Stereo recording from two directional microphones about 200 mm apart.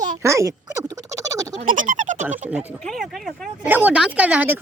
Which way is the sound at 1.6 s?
40° right (ahead or behind).